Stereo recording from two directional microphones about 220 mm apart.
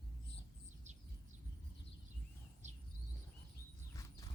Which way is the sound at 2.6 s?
30° right (ahead or behind).